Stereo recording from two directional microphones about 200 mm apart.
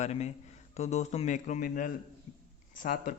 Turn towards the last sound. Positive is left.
turn(degrees=40)  # may be behind; listen again after turning